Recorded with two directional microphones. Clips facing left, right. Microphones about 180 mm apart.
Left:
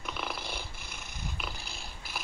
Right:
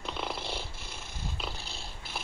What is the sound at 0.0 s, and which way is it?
Cat, 25° right (ahead or behind).